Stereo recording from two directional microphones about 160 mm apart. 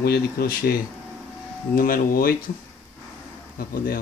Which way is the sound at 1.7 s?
65° left (ahead or behind).